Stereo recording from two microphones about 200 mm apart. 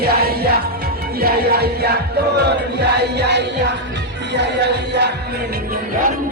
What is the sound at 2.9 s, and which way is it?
Music, 55° right (ahead or behind).